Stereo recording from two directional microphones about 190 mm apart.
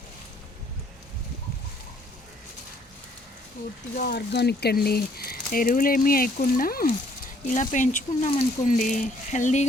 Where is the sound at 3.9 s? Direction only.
55° left (ahead or behind); by 9.7 s 40° left (ahead or behind).